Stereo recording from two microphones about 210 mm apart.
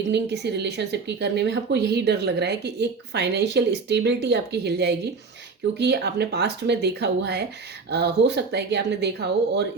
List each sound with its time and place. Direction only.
0.1 s speech: 55° right (ahead or behind)